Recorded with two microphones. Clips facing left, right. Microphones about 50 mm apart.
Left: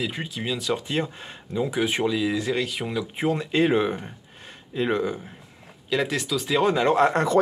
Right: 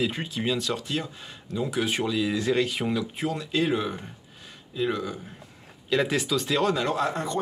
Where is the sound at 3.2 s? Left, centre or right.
Left.